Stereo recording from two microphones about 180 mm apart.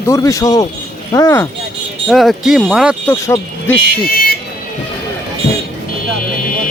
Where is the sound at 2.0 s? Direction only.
Centre (ahead or behind).